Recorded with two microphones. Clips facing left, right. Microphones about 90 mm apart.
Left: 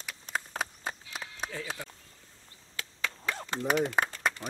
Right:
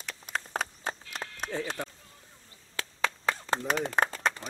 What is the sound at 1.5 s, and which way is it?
Speech, 25° right (ahead or behind).